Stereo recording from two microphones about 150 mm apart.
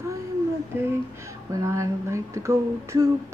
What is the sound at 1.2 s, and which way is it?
Speech, 20° right (ahead or behind).